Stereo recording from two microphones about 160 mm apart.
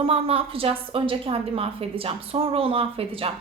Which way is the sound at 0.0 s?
35° right (ahead or behind).